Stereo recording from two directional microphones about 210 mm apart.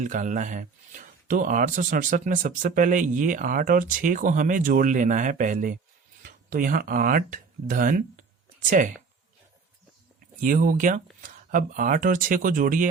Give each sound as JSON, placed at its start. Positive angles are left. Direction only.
{"t": 0.0, "sound": "speech", "side_deg": -35}
{"t": 10.4, "sound": "speech", "side_deg": -40}